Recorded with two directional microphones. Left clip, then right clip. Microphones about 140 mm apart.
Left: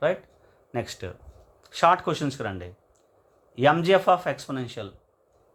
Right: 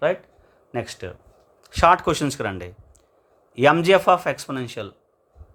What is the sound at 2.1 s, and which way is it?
Speech, 50° right (ahead or behind).